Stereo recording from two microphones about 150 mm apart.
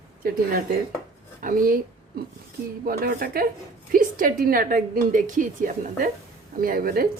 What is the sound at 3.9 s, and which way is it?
A woman's voice, 65° right (ahead or behind).